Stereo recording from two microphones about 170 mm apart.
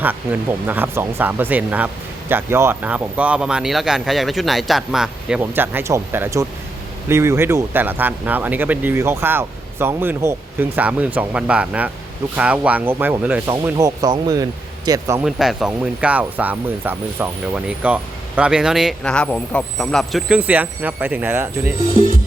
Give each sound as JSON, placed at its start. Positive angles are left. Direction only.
{"t": 0.0, "sound": "speech", "side_deg": -10}
{"t": 15.2, "sound": "speech", "side_deg": -5}